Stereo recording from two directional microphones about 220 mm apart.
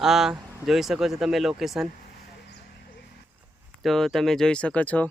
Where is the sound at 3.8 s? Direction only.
Centre (ahead or behind).